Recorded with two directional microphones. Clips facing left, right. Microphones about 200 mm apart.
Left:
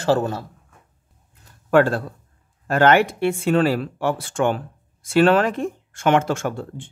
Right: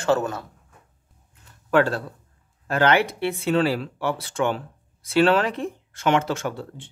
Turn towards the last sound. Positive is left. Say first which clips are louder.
# left 3 dB
turn(degrees=50)  # may be behind; listen again after turning